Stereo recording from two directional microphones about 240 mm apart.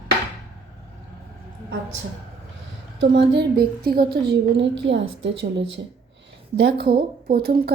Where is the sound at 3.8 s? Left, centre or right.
Right.